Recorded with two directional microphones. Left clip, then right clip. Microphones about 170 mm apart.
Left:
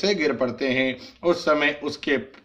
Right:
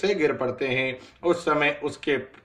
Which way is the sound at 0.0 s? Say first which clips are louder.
Left 1 dB; 50° left (ahead or behind).